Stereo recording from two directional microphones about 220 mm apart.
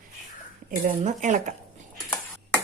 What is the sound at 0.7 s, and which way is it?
Speech, 35° right (ahead or behind).